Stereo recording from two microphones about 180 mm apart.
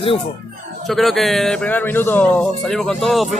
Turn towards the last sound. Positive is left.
turn(degrees=0)  # may be behind; listen again after turning